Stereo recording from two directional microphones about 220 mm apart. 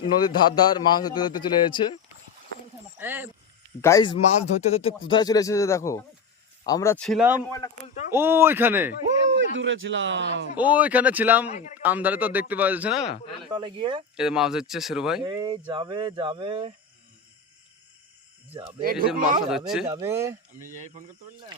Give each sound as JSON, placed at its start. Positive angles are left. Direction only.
{"t": 0.0, "sound": "a man's voice", "side_deg": 20}
{"t": 3.0, "sound": "a man's voice", "side_deg": -10}
{"t": 3.8, "sound": "speech", "side_deg": 15}
{"t": 7.4, "sound": "speech", "side_deg": 15}
{"t": 8.1, "sound": "a man's voice", "side_deg": -10}
{"t": 9.4, "sound": "speech", "side_deg": -60}
{"t": 10.6, "sound": "a man's voice", "side_deg": -5}
{"t": 13.5, "sound": "speech", "side_deg": -20}
{"t": 14.2, "sound": "speech", "side_deg": -5}
{"t": 15.2, "sound": "speech", "side_deg": -20}
{"t": 18.8, "sound": "speech", "side_deg": -40}
{"t": 19.5, "sound": "speech", "side_deg": 0}
{"t": 19.9, "sound": "a man's voice", "side_deg": -10}